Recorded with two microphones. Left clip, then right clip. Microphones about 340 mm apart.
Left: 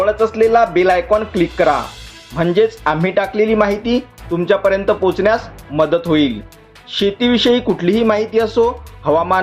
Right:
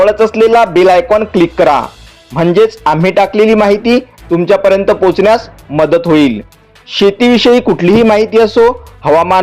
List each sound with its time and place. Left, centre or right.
0.0 s speech: right